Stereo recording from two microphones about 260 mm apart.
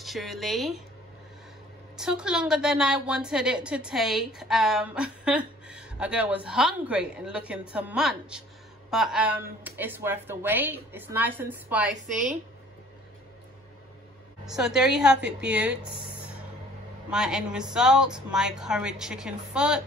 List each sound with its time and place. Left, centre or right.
0.0 s a woman's voice: centre
2.0 s a woman's voice: centre
12.1 s speech: right
14.4 s a woman's voice: centre
17.1 s a woman's voice: centre